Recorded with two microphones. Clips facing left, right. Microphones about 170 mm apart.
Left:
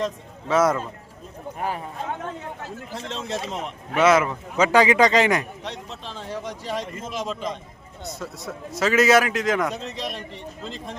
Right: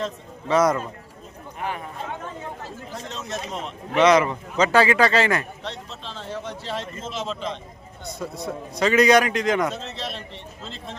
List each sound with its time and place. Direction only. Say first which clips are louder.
0.4 s a man's voice: even; 5° left (ahead or behind)
1.5 s speech: left 1 dB; 40° left (ahead or behind)
3.1 s a man's voice: left 3 dB; 30° left (ahead or behind)
3.9 s a man's voice: right 1 dB; 5° left (ahead or behind)
8.0 s a man's voice: right 3 dB; centre (ahead or behind)
9.7 s a man's voice: left 1 dB; 15° left (ahead or behind)